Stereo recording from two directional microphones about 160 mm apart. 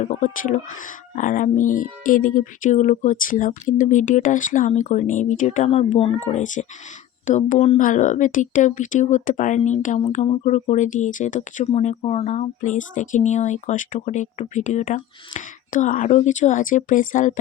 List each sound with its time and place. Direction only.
0.0 s speech: 50° left (ahead or behind)